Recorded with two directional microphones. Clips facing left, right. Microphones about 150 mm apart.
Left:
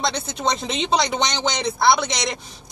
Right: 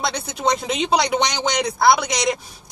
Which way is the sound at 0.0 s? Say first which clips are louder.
Right 1 dB; 10° right (ahead or behind).